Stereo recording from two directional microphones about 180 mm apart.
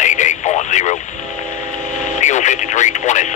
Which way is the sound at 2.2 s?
40° left (ahead or behind).